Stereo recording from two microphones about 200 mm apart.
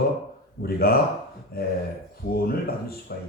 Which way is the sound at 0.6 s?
50° left (ahead or behind).